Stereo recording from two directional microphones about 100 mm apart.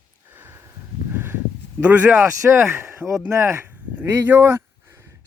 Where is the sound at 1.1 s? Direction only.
20° right (ahead or behind).